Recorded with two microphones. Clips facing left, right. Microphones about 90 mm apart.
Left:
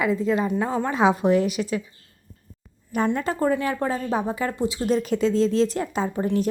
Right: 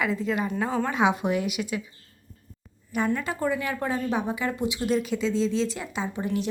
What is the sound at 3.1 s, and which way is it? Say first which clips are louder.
A woman's voice: left 4 dB; 35° left (ahead or behind).